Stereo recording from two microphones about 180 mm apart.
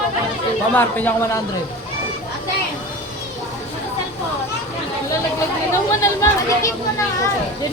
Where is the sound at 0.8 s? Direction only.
10° left (ahead or behind).